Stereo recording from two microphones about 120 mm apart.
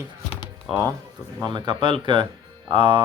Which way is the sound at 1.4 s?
40° right (ahead or behind).